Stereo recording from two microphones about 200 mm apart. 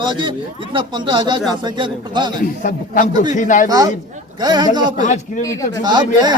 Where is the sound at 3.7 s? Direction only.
20° right (ahead or behind).